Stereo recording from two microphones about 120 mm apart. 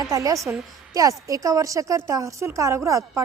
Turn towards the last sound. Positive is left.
turn(degrees=-25)  # may be behind; listen again after turning